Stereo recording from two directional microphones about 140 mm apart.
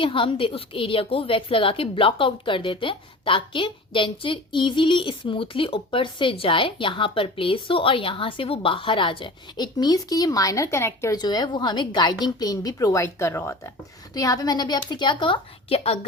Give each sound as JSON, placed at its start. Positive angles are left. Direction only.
{"t": 0.0, "sound": "a woman's voice", "side_deg": 40}
{"t": 11.2, "sound": "a woman's voice", "side_deg": 30}